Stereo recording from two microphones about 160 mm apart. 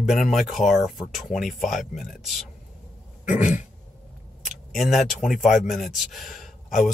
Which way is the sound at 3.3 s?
50° left (ahead or behind).